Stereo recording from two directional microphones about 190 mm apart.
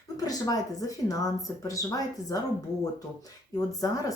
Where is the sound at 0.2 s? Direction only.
20° left (ahead or behind).